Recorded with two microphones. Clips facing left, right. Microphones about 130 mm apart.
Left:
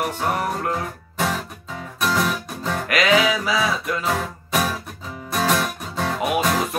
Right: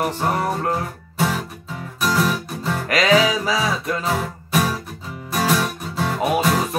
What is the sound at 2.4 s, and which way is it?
Music, 5° right (ahead or behind).